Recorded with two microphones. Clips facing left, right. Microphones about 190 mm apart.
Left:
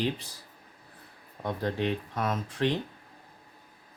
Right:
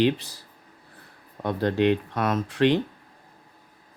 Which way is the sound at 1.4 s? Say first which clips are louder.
Right 8 dB; 75° right (ahead or behind).